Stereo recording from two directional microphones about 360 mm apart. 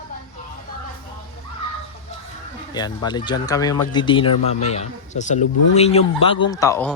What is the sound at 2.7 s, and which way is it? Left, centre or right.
Speech, centre.